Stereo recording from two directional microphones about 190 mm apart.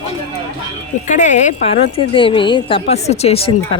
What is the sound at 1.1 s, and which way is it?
A woman's voice, 40° left (ahead or behind).